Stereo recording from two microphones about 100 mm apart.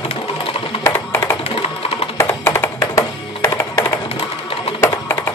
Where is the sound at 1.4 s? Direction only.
85° left.